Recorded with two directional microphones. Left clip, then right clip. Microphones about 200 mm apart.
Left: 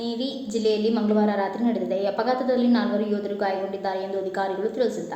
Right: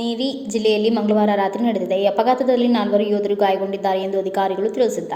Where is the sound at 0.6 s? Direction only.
35° right (ahead or behind).